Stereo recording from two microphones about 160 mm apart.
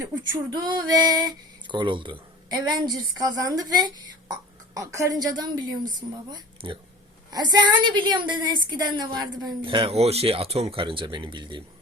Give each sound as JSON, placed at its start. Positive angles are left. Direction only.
{"t": 0.5, "sound": "a woman's voice", "side_deg": -25}